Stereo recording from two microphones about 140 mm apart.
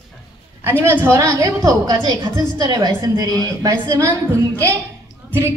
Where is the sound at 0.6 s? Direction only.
15° right (ahead or behind).